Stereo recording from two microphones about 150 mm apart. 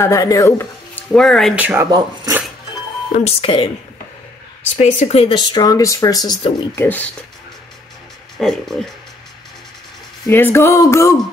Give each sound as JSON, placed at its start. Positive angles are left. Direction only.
{"t": 0.0, "sound": "speech", "side_deg": 20}
{"t": 1.5, "sound": "speech", "side_deg": -10}
{"t": 1.9, "sound": "speech", "side_deg": -25}
{"t": 3.1, "sound": "speech", "side_deg": 40}
{"t": 4.7, "sound": "speech", "side_deg": 45}
{"t": 5.3, "sound": "speech", "side_deg": 30}
{"t": 6.7, "sound": "speech", "side_deg": 15}
{"t": 8.4, "sound": "speech", "side_deg": 5}
{"t": 10.2, "sound": "speech", "side_deg": 15}